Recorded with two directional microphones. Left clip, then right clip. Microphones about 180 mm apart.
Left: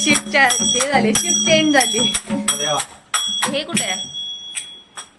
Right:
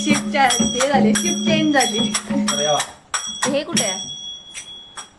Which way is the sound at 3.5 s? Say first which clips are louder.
Right 1 dB; 45° right (ahead or behind).